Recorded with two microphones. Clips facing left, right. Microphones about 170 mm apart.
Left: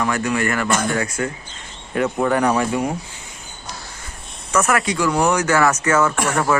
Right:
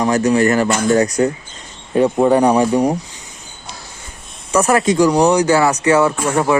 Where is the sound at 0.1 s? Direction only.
40° right (ahead or behind).